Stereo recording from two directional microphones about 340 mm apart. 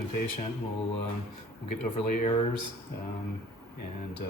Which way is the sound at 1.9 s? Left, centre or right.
Centre.